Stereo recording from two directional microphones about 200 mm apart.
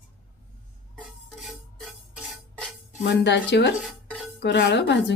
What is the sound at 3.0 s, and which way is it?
Speech, 60° left (ahead or behind).